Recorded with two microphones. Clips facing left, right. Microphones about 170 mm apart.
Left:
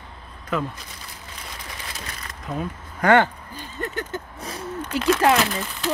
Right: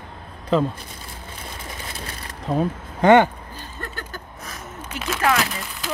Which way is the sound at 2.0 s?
30° right (ahead or behind).